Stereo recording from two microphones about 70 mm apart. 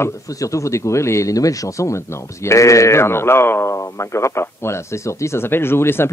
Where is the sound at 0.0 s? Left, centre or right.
Left.